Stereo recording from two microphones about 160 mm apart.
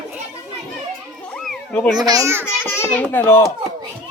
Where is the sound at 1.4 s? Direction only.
5° left (ahead or behind).